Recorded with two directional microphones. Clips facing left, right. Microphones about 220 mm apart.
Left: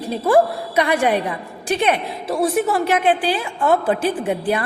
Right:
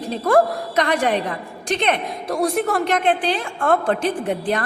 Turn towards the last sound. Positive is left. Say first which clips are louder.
# left 1 dB
turn(degrees=10)  # may be behind; listen again after turning